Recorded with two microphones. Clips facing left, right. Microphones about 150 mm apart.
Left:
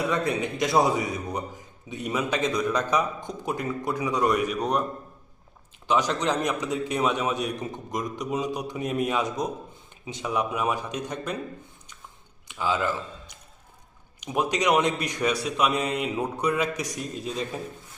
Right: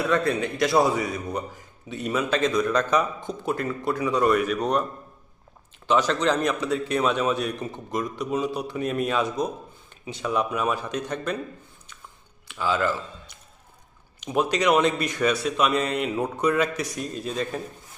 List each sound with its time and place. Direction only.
0.1 s a man's voice: 15° left (ahead or behind)
5.9 s a man's voice: 15° left (ahead or behind)
12.5 s a man's voice: 15° left (ahead or behind)